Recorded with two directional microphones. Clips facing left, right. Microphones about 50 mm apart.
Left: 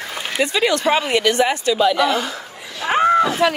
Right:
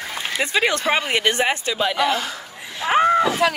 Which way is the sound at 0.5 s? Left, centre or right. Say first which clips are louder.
Left 2 dB; right.